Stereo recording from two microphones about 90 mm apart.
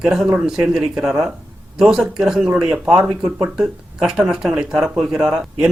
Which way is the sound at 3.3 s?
20° right (ahead or behind).